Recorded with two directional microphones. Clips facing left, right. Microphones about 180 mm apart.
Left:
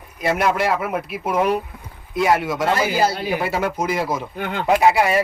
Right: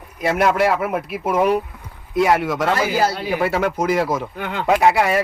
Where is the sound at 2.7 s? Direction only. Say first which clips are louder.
Even; 20° left (ahead or behind).